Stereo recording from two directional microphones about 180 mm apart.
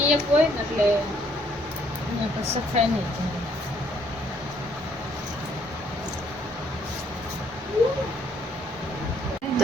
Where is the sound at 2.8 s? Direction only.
35° right (ahead or behind).